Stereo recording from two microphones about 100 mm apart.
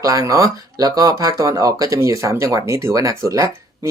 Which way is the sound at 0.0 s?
35° right (ahead or behind).